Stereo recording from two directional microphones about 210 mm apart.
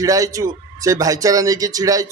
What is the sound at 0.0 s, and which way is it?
Speech, 15° right (ahead or behind).